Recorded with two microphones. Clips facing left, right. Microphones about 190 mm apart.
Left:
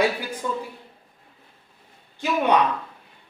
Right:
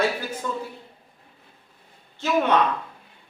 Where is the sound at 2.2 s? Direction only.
15° left (ahead or behind).